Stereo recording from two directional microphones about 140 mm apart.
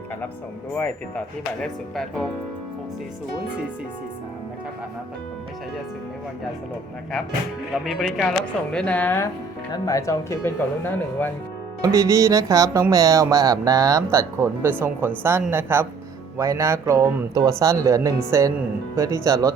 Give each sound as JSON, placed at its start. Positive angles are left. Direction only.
{"t": 0.8, "sound": "speech", "side_deg": 10}
{"t": 7.9, "sound": "speech", "side_deg": 0}
{"t": 9.7, "sound": "speech", "side_deg": 25}
{"t": 11.8, "sound": "speech", "side_deg": -25}